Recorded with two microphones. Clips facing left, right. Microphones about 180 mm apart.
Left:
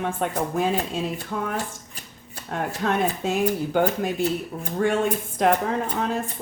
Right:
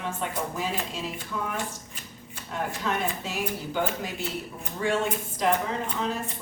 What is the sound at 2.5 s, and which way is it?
Speech, 55° left (ahead or behind).